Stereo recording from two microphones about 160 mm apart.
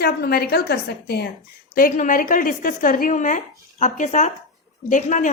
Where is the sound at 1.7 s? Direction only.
60° left (ahead or behind).